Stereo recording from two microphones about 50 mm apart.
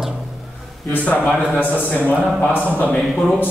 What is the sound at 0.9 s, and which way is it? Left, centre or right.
A man's voice, left.